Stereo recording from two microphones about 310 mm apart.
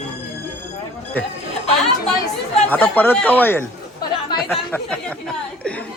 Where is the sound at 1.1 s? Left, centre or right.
Centre.